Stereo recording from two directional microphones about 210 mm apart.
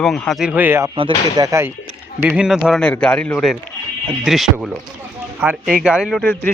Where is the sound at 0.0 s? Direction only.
Centre (ahead or behind).